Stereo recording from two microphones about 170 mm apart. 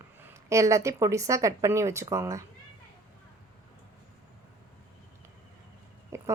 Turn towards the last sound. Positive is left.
turn(degrees=-15)  # may be behind; listen again after turning